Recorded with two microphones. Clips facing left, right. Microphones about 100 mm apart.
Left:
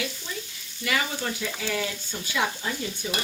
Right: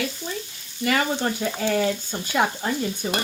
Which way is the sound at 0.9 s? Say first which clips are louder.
Right 5 dB; 45° right (ahead or behind).